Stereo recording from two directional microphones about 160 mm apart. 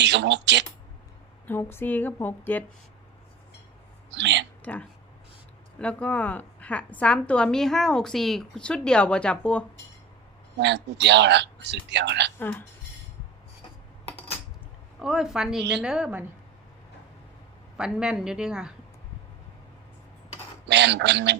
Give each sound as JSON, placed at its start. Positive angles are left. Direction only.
{"t": 0.0, "sound": "speech", "side_deg": -90}
{"t": 1.5, "sound": "a woman's voice", "side_deg": 15}
{"t": 4.1, "sound": "speech", "side_deg": -90}
{"t": 4.6, "sound": "a woman's voice", "side_deg": 10}
{"t": 10.6, "sound": "speech", "side_deg": -90}
{"t": 12.4, "sound": "a woman's voice", "side_deg": 10}
{"t": 14.9, "sound": "a woman's voice", "side_deg": -5}
{"t": 17.7, "sound": "a woman's voice", "side_deg": -5}
{"t": 20.7, "sound": "speech", "side_deg": -90}